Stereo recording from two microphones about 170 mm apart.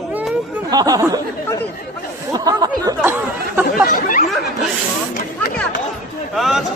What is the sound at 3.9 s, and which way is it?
Chatter, 50° left (ahead or behind).